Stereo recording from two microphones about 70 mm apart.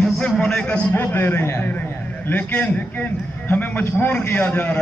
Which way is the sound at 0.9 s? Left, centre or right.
Left.